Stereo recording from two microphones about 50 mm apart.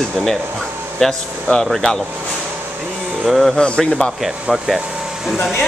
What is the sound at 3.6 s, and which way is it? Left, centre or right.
Speech, centre.